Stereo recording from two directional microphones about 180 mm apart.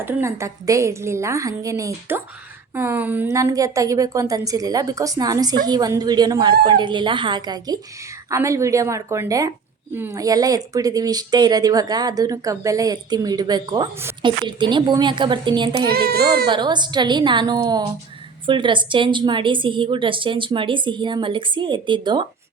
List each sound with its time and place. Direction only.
0.0 s a woman's voice: 15° right (ahead or behind)
15.9 s a child's voice: 60° right (ahead or behind)
16.5 s speech: 25° right (ahead or behind)